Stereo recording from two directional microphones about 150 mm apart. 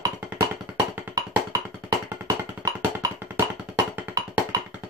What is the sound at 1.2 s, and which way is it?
Music, 25° right (ahead or behind).